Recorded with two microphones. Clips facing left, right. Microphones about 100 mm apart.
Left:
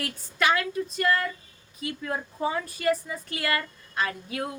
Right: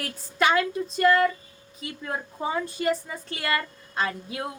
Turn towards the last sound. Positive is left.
turn(degrees=-25)  # may be behind; listen again after turning